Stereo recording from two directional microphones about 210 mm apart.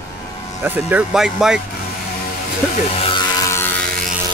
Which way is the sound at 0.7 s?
10° right (ahead or behind).